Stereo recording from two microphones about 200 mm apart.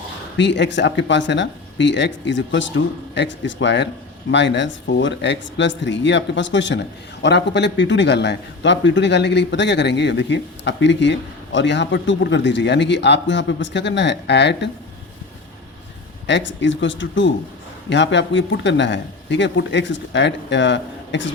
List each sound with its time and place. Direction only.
0.3 s a man's voice: 60° left (ahead or behind)
16.2 s a man's voice: 65° left (ahead or behind)